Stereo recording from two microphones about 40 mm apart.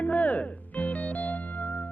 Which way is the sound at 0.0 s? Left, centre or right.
Left.